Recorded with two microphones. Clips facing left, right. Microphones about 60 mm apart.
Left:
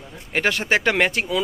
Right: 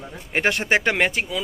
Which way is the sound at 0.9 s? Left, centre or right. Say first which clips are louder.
Left 1 dB; centre.